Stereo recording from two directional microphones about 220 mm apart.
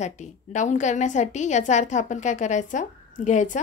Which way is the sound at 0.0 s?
30° left (ahead or behind).